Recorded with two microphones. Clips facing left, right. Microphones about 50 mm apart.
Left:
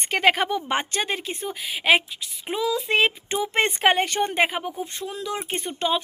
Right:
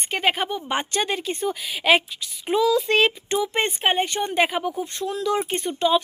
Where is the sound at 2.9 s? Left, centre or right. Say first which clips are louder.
Right 2 dB; left.